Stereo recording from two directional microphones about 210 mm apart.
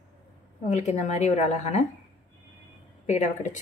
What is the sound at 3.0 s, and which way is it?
Speech, 35° left (ahead or behind).